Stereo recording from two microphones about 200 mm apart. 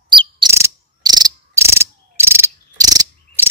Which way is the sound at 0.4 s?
15° right (ahead or behind).